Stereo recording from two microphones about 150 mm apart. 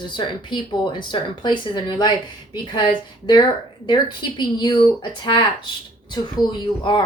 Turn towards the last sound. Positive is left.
turn(degrees=30)  # may be behind; listen again after turning